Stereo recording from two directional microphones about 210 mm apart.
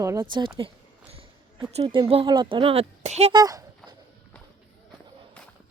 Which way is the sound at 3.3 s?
15° right (ahead or behind).